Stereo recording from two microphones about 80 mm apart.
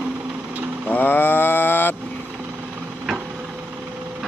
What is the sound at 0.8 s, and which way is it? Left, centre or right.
Vehicle, left.